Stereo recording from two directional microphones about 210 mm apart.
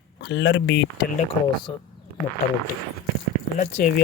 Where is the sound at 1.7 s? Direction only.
25° left (ahead or behind).